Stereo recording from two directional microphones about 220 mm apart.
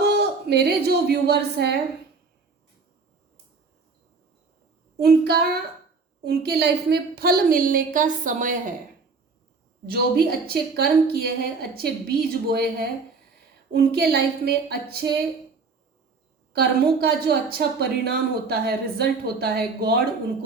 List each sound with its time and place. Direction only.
0.0 s a woman's voice: 50° right (ahead or behind)
4.9 s a woman's voice: 45° right (ahead or behind)
9.8 s a woman's voice: 45° right (ahead or behind)
16.5 s a woman's voice: 45° right (ahead or behind)